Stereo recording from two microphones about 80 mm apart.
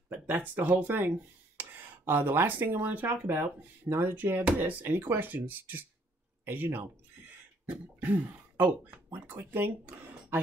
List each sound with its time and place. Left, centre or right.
0.6 s speech: right